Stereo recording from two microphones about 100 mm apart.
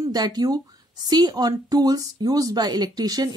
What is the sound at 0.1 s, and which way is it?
Speech, 40° right (ahead or behind).